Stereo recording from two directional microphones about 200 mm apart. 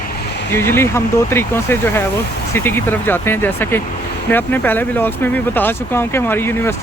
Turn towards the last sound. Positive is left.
turn(degrees=10)  # may be behind; listen again after turning